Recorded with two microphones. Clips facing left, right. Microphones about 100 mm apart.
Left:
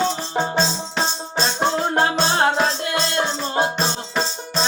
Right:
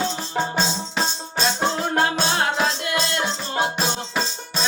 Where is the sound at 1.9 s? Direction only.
30° left (ahead or behind).